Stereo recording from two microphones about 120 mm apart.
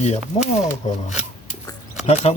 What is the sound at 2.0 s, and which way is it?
Speech, 65° left (ahead or behind).